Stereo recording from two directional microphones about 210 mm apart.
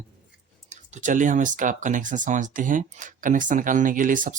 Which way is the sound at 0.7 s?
35° right (ahead or behind).